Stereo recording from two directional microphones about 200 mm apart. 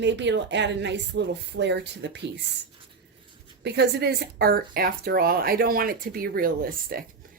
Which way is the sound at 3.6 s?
55° right (ahead or behind).